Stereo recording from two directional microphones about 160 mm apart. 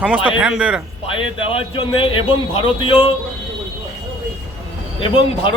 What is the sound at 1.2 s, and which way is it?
A man's voice, 35° left (ahead or behind).